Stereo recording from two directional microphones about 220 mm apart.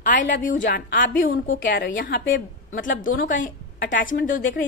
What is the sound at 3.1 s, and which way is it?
A woman's voice, 35° left (ahead or behind).